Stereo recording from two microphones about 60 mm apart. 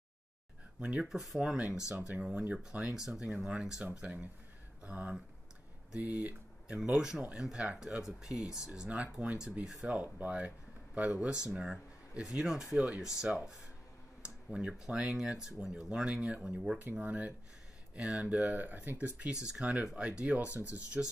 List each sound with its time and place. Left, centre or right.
0.7 s speech: centre
1.0 s speech: centre; by 5.1 s right
6.8 s speech: centre
10.0 s speech: right; by 16.7 s centre
17.0 s speech: right
17.9 s speech: centre